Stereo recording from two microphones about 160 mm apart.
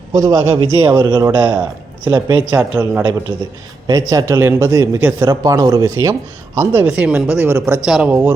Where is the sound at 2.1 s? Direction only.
25° right (ahead or behind).